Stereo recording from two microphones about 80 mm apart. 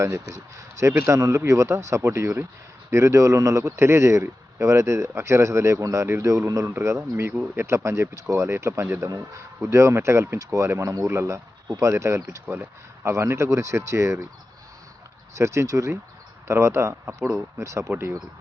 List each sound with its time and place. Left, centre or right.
0.0 s speech: right
9.0 s speech: right
15.4 s speech: right